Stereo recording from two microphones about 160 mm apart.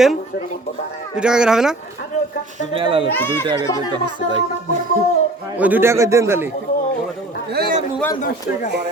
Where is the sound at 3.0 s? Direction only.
15° left (ahead or behind).